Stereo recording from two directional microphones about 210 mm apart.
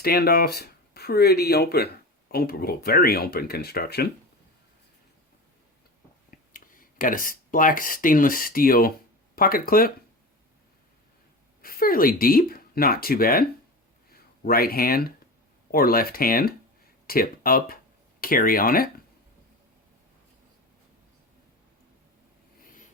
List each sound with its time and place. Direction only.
0.0 s speech: 45° left (ahead or behind)
6.3 s speech: 40° left (ahead or behind)
11.6 s speech: 45° left (ahead or behind)